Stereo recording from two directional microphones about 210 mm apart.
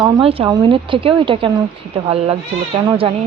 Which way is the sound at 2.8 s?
25° right (ahead or behind).